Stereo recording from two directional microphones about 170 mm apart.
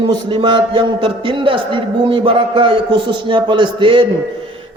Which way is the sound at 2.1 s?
35° right (ahead or behind).